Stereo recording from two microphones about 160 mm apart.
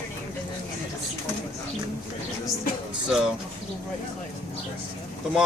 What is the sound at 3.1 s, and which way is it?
Speech, 5° right (ahead or behind).